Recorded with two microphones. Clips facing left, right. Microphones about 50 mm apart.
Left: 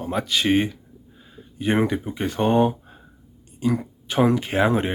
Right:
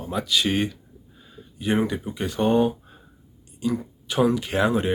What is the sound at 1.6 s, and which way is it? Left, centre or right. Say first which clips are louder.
Speech: left 2 dB; left.